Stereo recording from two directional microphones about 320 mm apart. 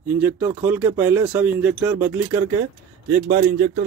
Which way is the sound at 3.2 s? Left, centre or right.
Right.